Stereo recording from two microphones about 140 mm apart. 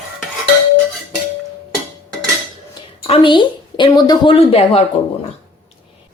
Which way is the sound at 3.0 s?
40° left (ahead or behind).